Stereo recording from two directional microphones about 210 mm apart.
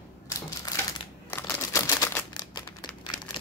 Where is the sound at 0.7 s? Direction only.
15° left (ahead or behind).